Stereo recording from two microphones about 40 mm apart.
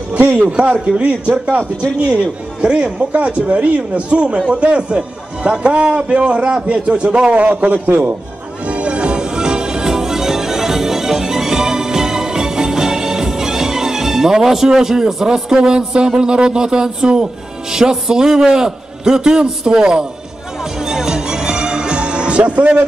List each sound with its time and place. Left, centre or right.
0.5 s a man's voice: right
2.6 s a man's voice: right
8.6 s music: right
17.7 s a man's voice: centre
20.8 s music: centre